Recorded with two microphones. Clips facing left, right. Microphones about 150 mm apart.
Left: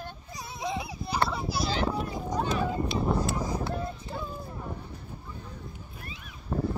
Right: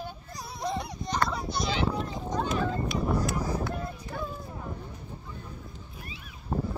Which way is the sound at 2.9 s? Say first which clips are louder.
Left 1 dB; 25° left (ahead or behind).